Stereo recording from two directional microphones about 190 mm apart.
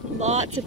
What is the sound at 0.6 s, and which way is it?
Speech, 20° right (ahead or behind).